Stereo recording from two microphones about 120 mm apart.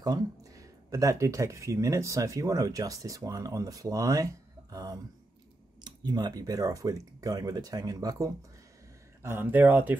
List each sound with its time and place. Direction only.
0.0 s speech: 30° right (ahead or behind)
9.2 s speech: 15° right (ahead or behind)